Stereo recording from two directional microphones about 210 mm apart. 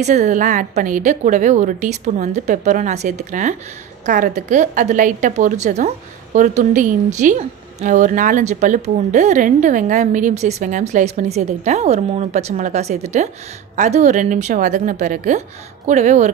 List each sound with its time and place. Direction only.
0.0 s a woman's voice: 35° right (ahead or behind)